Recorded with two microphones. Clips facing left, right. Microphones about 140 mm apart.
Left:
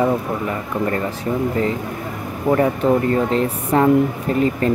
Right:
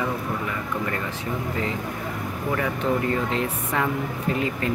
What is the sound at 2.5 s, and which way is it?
Speech, 40° left (ahead or behind).